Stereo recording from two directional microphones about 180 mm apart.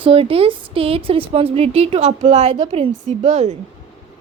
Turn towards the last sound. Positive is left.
turn(degrees=-35)  # may be behind; listen again after turning